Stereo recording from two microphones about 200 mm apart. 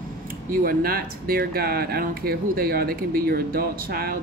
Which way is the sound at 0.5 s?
50° right (ahead or behind).